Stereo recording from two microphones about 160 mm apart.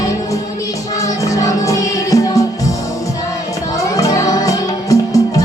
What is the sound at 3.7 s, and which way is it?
Music, 20° left (ahead or behind).